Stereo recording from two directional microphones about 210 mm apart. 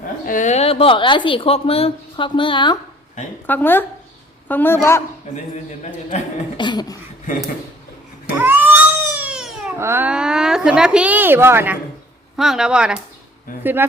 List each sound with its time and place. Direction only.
0.3 s speech: 35° left (ahead or behind)
3.4 s a man's voice: 10° left (ahead or behind)
5.3 s speech: 35° left (ahead or behind)
6.6 s speech: 20° left (ahead or behind)
8.4 s cat: 10° right (ahead or behind)
12.4 s speech: centre (ahead or behind)
13.5 s speech: 40° left (ahead or behind)